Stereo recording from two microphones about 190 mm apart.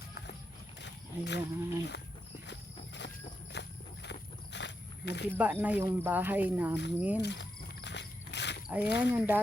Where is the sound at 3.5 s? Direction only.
65° left (ahead or behind).